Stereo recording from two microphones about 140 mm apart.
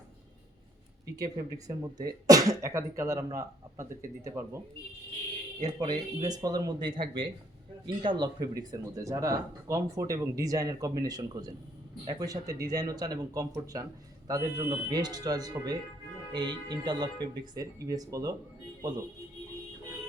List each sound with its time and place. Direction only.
1.1 s speech: 25° right (ahead or behind)
5.8 s speech: 30° right (ahead or behind)